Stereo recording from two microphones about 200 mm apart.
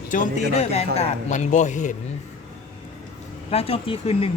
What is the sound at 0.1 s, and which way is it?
Speech, 35° left (ahead or behind).